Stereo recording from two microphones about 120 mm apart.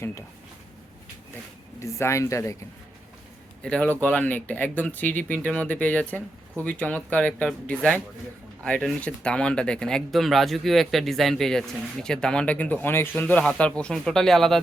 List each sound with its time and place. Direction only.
1.8 s speech: 25° left (ahead or behind)
3.6 s speech: 10° left (ahead or behind)